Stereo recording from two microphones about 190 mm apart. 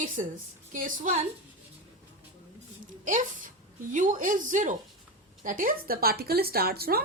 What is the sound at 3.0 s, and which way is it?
Speech, 45° right (ahead or behind).